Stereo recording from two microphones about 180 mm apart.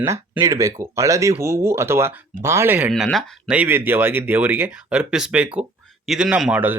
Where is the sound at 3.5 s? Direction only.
10° right (ahead or behind).